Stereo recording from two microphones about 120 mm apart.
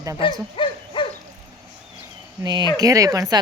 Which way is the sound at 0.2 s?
45° left (ahead or behind).